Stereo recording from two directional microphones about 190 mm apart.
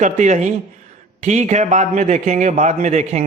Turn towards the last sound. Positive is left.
turn(degrees=-35)  # may be behind; listen again after turning